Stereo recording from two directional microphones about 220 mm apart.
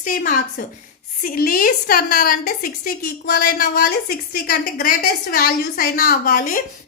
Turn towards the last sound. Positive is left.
turn(degrees=40)  # may be behind; listen again after turning